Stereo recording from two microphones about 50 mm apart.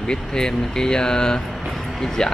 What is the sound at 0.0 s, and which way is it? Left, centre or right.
Speech, centre.